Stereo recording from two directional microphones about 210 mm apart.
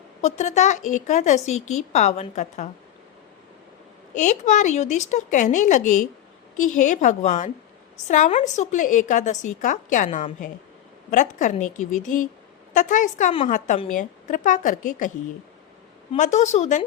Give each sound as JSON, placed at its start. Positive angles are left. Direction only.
{"t": 0.2, "sound": "a woman's voice", "side_deg": 30}
{"t": 4.1, "sound": "a woman's voice", "side_deg": 35}
{"t": 16.1, "sound": "a woman's voice", "side_deg": 35}